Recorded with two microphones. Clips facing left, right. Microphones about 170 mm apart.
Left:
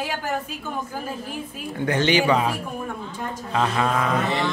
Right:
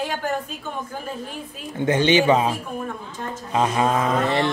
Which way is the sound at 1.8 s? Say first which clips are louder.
Right 3 dB; 20° right (ahead or behind).